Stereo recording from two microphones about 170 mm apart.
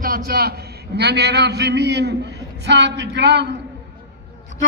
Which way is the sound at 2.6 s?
90° right.